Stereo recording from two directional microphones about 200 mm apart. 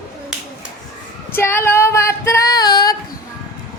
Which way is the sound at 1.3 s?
10° left (ahead or behind).